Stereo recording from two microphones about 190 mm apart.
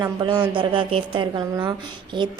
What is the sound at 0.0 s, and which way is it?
A woman's voice, 25° right (ahead or behind).